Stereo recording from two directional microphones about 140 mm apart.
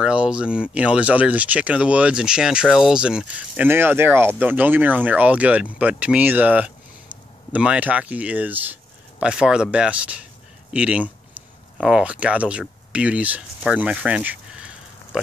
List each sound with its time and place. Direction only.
0.0 s speech: 10° right (ahead or behind)